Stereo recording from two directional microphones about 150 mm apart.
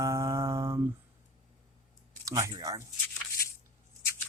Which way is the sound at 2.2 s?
20° right (ahead or behind).